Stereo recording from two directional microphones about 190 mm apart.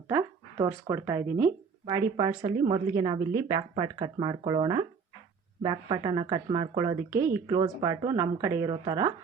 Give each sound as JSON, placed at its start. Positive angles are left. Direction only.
{"t": 0.6, "sound": "speech", "side_deg": -15}